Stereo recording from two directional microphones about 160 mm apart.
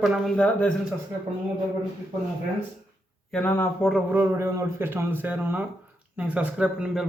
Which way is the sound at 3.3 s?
10° left (ahead or behind).